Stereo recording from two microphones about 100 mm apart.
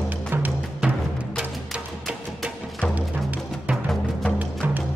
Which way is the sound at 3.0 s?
15° right (ahead or behind).